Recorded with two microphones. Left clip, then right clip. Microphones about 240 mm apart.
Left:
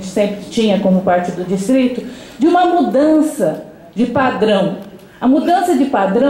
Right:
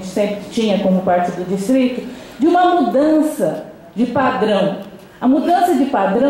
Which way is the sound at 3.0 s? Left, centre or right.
Centre.